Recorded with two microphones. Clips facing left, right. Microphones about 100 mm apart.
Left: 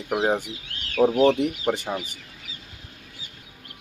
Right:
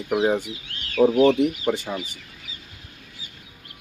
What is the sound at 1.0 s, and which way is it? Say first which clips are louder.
Speech: right 2 dB; 20° left (ahead or behind).